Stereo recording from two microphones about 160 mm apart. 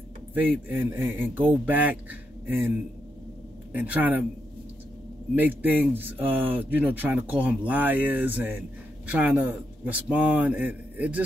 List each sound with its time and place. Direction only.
0.3 s speech: 10° right (ahead or behind)
3.7 s speech: 10° right (ahead or behind)
5.3 s speech: 10° right (ahead or behind)